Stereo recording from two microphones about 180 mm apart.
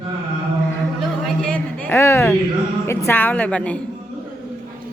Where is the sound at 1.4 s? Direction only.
10° left (ahead or behind).